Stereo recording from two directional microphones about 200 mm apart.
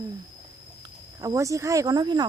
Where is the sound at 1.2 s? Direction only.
15° right (ahead or behind).